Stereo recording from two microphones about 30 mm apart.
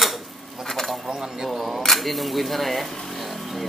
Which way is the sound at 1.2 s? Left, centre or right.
Centre.